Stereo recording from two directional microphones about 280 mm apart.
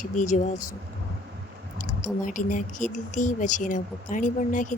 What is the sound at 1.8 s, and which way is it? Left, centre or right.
Speech, left.